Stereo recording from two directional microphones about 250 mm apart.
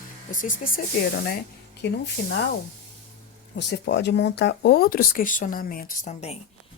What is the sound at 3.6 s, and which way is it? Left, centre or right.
Speech, left.